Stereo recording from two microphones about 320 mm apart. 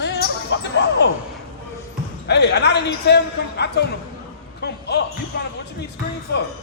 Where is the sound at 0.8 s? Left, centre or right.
Left.